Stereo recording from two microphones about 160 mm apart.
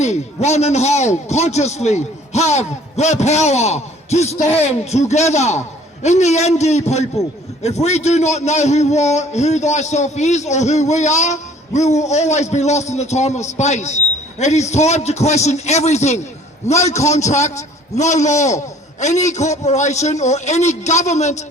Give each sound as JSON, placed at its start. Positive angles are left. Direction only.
{"t": 0.0, "sound": "a man's voice", "side_deg": 45}